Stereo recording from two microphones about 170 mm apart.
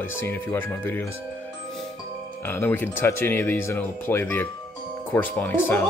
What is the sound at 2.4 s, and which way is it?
Speech, 10° left (ahead or behind).